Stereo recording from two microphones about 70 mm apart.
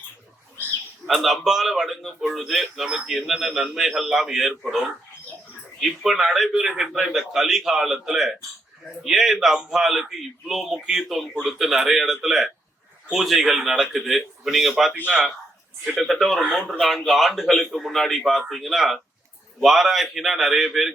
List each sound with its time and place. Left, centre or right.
1.0 s a man's voice: centre
16.0 s a man's voice: centre